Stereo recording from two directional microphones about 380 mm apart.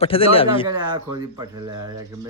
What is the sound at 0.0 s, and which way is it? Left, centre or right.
Speech, centre.